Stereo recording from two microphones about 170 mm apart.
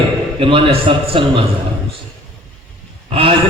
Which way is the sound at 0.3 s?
30° right (ahead or behind).